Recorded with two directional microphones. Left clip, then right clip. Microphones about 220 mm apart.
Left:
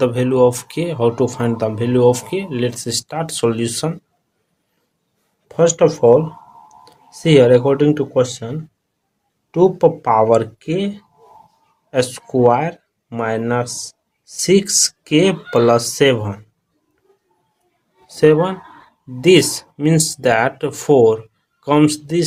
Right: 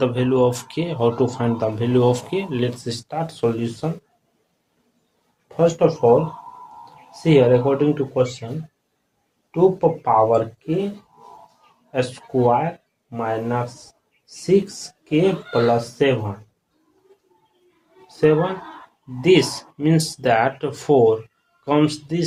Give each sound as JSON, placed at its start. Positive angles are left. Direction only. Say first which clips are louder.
{"t": 0.0, "sound": "speech", "louder": "left 4 dB", "side_deg": 35}
{"t": 5.5, "sound": "speech", "louder": "left 4 dB", "side_deg": 45}
{"t": 7.1, "sound": "speech", "louder": "left 4 dB", "side_deg": 45}
{"t": 9.5, "sound": "speech", "louder": "left 4 dB", "side_deg": 45}
{"t": 11.9, "sound": "speech", "louder": "left 5 dB", "side_deg": 40}
{"t": 18.1, "sound": "speech", "louder": "left 5 dB", "side_deg": 40}